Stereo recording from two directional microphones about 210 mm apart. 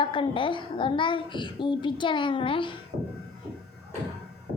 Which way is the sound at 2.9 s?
45° right (ahead or behind).